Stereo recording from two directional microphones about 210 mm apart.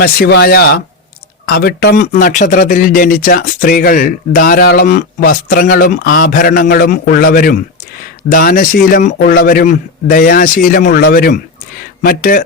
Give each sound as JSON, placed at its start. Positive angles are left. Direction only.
{"t": 0.0, "sound": "speech", "side_deg": 50}